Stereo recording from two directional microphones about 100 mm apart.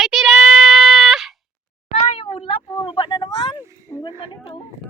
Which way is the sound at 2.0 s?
85° left.